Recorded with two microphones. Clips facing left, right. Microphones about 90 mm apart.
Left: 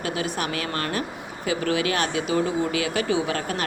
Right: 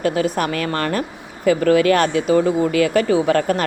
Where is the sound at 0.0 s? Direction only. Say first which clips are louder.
Right 8 dB; 45° right (ahead or behind).